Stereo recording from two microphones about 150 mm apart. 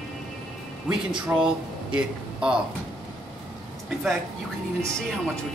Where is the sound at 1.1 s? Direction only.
35° right (ahead or behind).